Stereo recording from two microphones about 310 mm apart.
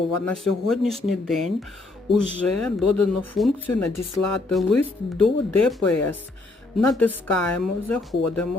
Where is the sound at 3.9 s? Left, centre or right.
Left.